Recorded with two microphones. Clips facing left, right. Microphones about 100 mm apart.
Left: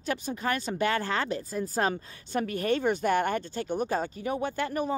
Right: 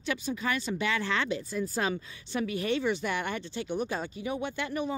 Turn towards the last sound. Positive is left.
turn(degrees=40)  # may be behind; listen again after turning